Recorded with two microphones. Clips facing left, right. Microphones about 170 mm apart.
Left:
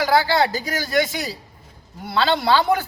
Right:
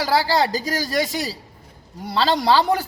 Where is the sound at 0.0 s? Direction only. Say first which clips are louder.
Left 1 dB; 35° right (ahead or behind).